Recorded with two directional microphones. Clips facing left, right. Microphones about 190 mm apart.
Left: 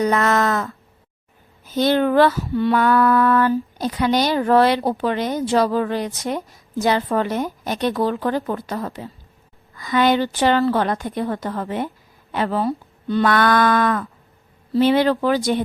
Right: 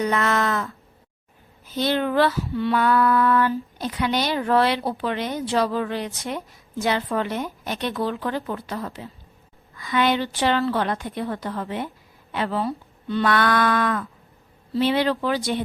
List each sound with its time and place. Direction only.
0.0 s female singing: 40° left (ahead or behind)
1.7 s female singing: 45° left (ahead or behind)
6.2 s a woman's voice: 40° left (ahead or behind)
9.7 s female singing: 40° left (ahead or behind)